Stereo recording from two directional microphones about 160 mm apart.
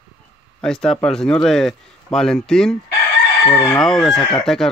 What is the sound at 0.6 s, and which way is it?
Speech, 5° left (ahead or behind).